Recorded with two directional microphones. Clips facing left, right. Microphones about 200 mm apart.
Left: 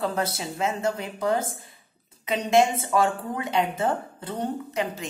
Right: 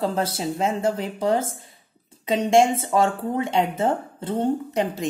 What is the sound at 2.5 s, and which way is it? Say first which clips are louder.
Speech: right 2 dB; 30° right (ahead or behind).